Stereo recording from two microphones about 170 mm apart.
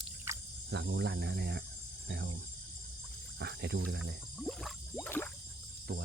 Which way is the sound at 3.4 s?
85° right.